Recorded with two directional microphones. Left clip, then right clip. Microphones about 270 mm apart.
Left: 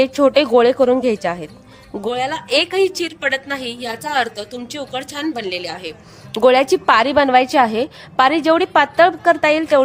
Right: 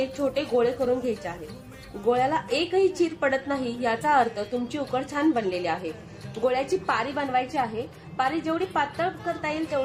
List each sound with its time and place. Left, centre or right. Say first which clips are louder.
0.0 s a woman's voice: left 13 dB; left